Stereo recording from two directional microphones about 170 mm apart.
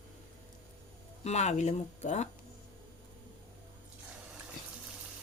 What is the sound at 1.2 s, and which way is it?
Speech, 40° left (ahead or behind).